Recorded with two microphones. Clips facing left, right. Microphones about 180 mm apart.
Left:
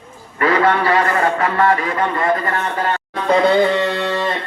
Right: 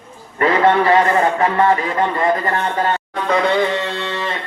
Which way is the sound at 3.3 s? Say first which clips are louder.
Left 3 dB; 35° left (ahead or behind).